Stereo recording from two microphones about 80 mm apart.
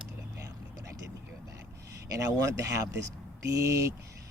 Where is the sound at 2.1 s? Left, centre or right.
Right.